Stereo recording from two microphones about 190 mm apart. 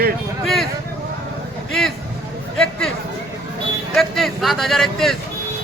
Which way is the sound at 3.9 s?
Centre (ahead or behind).